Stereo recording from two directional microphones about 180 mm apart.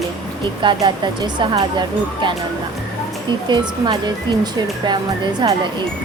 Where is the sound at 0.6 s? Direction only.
25° right (ahead or behind).